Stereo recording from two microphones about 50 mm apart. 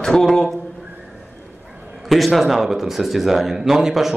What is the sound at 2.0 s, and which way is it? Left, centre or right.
A man's voice, centre.